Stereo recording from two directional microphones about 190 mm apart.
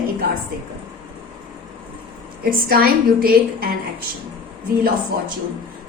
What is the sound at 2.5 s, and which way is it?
A woman's voice, 50° right (ahead or behind).